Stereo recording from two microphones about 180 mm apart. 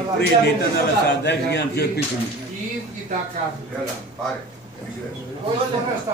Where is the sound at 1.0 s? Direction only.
70° left (ahead or behind).